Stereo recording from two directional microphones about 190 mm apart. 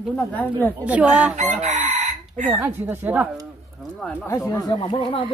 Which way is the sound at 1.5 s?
40° right (ahead or behind).